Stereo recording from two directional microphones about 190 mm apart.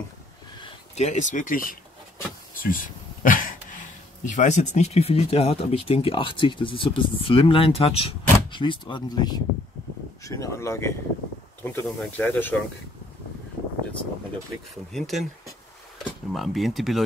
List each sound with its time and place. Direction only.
0.6 s speech: 35° left (ahead or behind); by 12.5 s 10° left (ahead or behind)
14.9 s speech: centre (ahead or behind)